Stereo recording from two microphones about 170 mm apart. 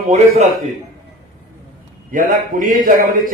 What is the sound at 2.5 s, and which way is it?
Speech, 50° right (ahead or behind).